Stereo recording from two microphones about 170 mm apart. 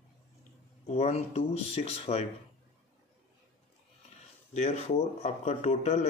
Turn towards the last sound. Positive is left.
turn(degrees=40)  # may be behind; listen again after turning